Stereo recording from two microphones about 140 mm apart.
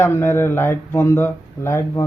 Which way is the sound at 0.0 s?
15° left (ahead or behind).